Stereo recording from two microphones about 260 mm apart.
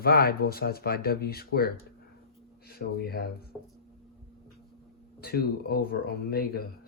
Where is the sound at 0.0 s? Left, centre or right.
Left.